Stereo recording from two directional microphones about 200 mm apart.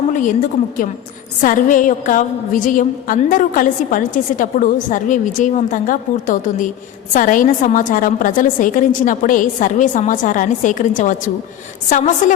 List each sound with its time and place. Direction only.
0.1 s a woman's voice: 40° left (ahead or behind)
1.4 s a woman's voice: 40° left (ahead or behind)